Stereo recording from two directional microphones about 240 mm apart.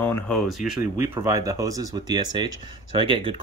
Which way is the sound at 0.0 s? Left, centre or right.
Centre.